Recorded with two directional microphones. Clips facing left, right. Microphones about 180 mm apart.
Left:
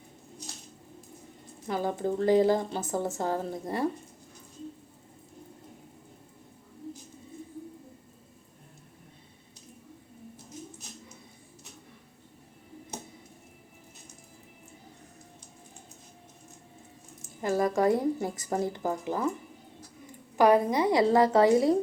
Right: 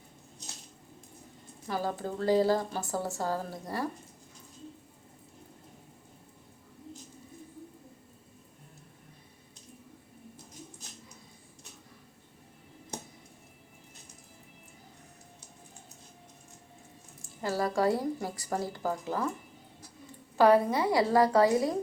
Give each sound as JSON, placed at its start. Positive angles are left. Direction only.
{"t": 1.6, "sound": "speech", "side_deg": 20}
{"t": 17.2, "sound": "a woman's voice", "side_deg": 20}
{"t": 20.3, "sound": "speech", "side_deg": 15}